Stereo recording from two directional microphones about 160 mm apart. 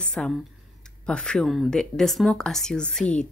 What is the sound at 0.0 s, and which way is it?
Speech, 5° left (ahead or behind).